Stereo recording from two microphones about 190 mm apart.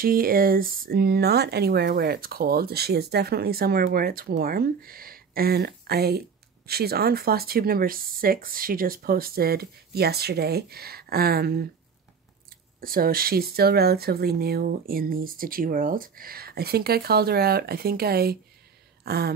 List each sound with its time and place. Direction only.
0.0 s speech: 50° right (ahead or behind)
12.8 s speech: 50° right (ahead or behind)